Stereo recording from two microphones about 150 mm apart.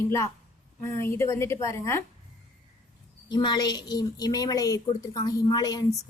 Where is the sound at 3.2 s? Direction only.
30° left (ahead or behind).